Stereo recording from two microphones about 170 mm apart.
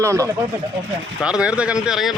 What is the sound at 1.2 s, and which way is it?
Speech, 5° right (ahead or behind).